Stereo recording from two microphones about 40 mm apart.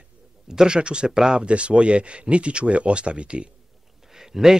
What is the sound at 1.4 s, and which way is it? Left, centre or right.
A man's voice, right.